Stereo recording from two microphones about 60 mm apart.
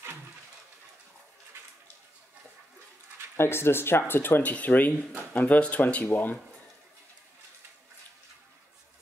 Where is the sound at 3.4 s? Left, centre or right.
Left.